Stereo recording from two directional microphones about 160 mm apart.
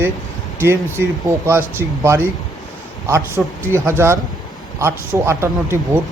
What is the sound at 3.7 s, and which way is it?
Speech, 15° right (ahead or behind).